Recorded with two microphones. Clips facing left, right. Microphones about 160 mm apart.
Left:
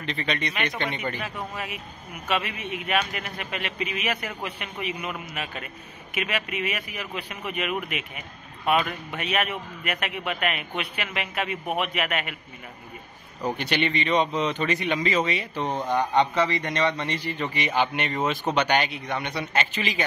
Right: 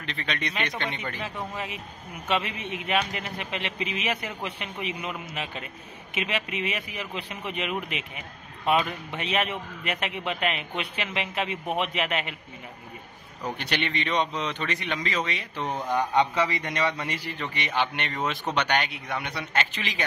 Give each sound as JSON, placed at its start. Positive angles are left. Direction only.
{"t": 0.0, "sound": "a man's voice", "side_deg": 0}
{"t": 1.2, "sound": "speech", "side_deg": -25}
{"t": 13.6, "sound": "a man's voice", "side_deg": 0}